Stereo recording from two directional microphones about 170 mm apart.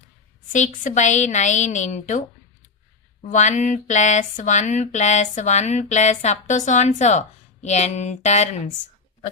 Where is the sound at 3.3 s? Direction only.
45° left (ahead or behind).